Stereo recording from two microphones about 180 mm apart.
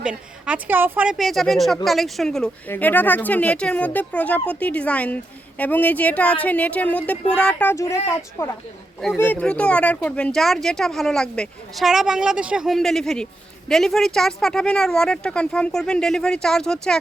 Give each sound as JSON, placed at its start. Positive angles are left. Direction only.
{"t": 0.0, "sound": "a woman's voice", "side_deg": -5}